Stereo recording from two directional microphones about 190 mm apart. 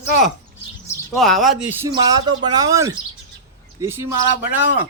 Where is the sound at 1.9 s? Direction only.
20° right (ahead or behind).